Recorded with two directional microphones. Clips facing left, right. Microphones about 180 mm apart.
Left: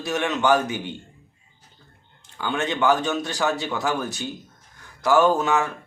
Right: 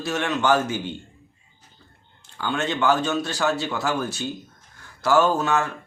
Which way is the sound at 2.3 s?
15° left (ahead or behind).